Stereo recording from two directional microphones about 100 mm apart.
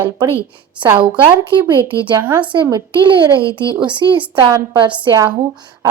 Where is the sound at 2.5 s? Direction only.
50° right (ahead or behind).